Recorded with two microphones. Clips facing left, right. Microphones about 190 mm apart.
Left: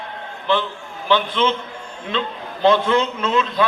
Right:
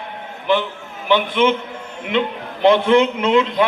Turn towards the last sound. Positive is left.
turn(degrees=-20)  # may be behind; listen again after turning